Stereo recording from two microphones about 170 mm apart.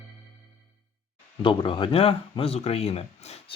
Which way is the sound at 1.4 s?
30° left (ahead or behind).